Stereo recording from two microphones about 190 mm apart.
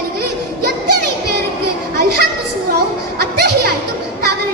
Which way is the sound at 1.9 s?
55° right (ahead or behind).